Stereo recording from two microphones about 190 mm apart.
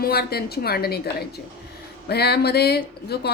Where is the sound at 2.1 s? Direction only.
60° left (ahead or behind).